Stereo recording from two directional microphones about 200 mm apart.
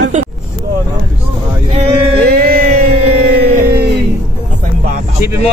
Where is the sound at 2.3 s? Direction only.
45° right (ahead or behind).